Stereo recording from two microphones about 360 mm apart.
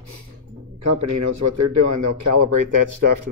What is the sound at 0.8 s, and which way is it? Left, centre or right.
Speech, right.